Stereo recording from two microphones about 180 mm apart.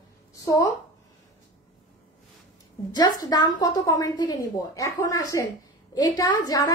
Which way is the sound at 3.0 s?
20° left (ahead or behind).